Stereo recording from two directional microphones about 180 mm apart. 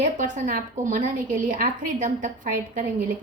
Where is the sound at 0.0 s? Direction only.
45° right (ahead or behind).